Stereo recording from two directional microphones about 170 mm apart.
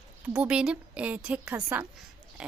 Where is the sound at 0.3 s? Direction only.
5° right (ahead or behind).